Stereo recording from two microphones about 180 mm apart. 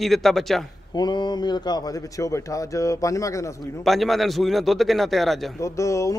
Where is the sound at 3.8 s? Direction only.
Centre (ahead or behind).